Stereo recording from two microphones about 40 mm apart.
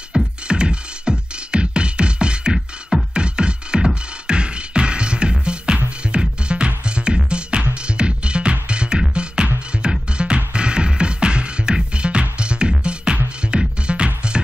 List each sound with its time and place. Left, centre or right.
0.1 s music: right